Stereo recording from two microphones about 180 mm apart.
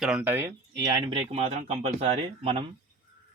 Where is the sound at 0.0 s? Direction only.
5° right (ahead or behind).